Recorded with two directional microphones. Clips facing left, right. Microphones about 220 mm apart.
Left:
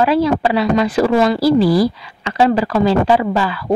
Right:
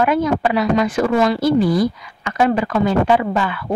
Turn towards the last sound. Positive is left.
turn(degrees=35)  # may be behind; listen again after turning